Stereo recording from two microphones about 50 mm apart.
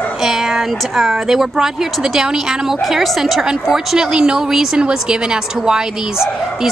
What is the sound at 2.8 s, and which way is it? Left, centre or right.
A woman's voice, centre.